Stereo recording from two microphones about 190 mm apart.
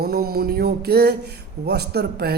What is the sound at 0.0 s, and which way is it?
Speech, 55° right (ahead or behind).